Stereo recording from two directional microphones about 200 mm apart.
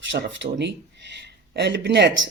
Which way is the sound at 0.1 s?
65° right (ahead or behind).